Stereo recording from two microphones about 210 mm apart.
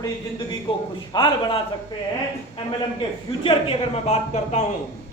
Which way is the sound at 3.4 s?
30° left (ahead or behind).